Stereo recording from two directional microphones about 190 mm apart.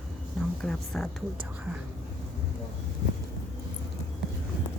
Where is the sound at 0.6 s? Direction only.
5° left (ahead or behind).